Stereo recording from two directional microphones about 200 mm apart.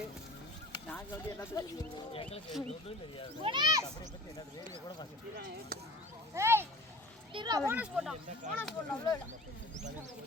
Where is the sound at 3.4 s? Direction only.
20° right (ahead or behind).